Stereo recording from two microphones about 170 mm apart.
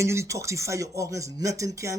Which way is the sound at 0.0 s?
15° right (ahead or behind).